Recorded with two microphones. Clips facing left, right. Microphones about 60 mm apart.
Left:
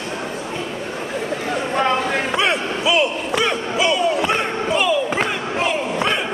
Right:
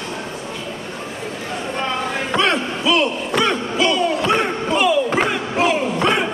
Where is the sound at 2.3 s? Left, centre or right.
Centre.